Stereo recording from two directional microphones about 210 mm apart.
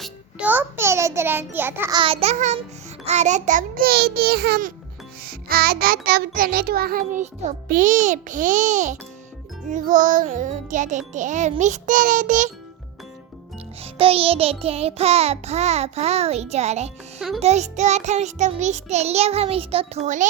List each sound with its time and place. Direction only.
0.0 s a child's voice: 5° right (ahead or behind)
2.0 s child singing: 30° right (ahead or behind)
3.0 s a child's voice: 35° right (ahead or behind)
5.2 s child singing: 45° right (ahead or behind)
13.8 s music: 25° right (ahead or behind)
17.2 s a child's voice: centre (ahead or behind)
17.4 s child singing: 30° right (ahead or behind)